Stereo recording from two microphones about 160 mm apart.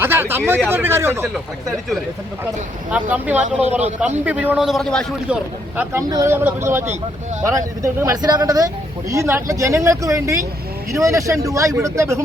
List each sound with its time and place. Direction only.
0.0 s speech: 15° right (ahead or behind)
2.9 s speech: 10° right (ahead or behind)
3.6 s a man's voice: 45° right (ahead or behind)
4.3 s a man's voice: 10° right (ahead or behind)
5.3 s speech: 10° right (ahead or behind)